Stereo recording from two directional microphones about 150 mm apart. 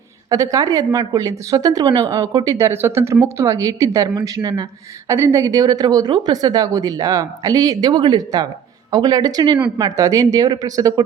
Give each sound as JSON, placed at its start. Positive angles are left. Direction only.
{"t": 0.3, "sound": "a woman's voice", "side_deg": -20}